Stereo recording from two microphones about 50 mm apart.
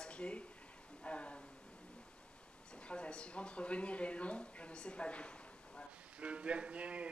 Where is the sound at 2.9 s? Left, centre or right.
Centre.